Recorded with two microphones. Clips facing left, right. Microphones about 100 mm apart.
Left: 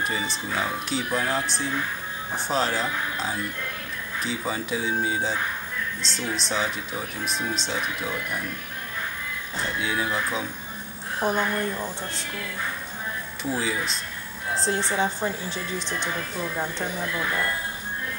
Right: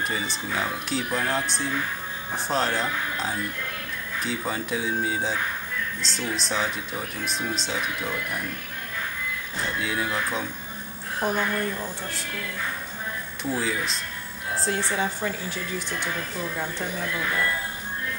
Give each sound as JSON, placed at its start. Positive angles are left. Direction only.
{"t": 0.0, "sound": "speech", "side_deg": 0}
{"t": 9.8, "sound": "speech", "side_deg": 0}
{"t": 11.2, "sound": "a woman's voice", "side_deg": 15}
{"t": 13.4, "sound": "speech", "side_deg": 0}
{"t": 14.6, "sound": "a woman's voice", "side_deg": 25}